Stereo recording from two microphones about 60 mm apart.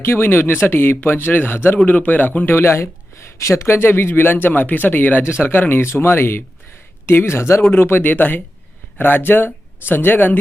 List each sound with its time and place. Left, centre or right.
0.0 s speech: left
2.6 s speech: left
7.6 s speech: left